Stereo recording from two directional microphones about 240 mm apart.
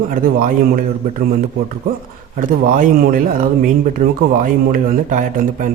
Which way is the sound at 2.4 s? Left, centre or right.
Right.